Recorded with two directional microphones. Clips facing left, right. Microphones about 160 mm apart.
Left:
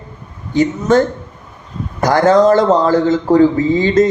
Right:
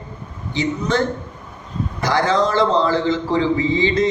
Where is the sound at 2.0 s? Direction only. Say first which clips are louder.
Left 8 dB; 45° left (ahead or behind).